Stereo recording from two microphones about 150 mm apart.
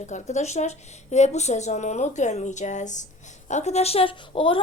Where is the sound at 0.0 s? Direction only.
50° left (ahead or behind).